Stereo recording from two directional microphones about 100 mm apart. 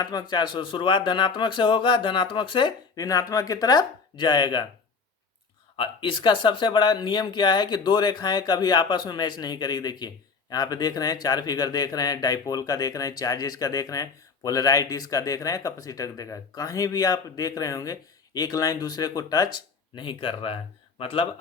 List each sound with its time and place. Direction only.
0.0 s speech: 45° left (ahead or behind)
2.9 s speech: 35° left (ahead or behind)
5.7 s speech: 60° left (ahead or behind)